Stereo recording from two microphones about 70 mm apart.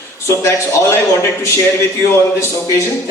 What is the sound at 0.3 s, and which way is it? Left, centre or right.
A man's voice, left.